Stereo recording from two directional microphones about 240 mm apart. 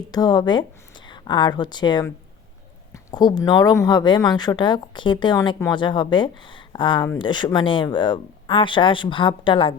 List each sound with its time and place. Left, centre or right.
0.1 s a woman's voice: centre